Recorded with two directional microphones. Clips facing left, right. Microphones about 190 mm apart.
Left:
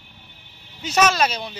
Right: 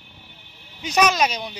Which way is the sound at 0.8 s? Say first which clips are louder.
Even; 15° right (ahead or behind).